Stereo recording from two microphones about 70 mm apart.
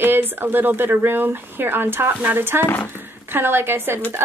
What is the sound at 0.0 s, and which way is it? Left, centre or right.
Speech, right.